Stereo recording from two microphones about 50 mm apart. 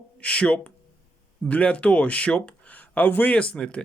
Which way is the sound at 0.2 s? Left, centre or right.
Left.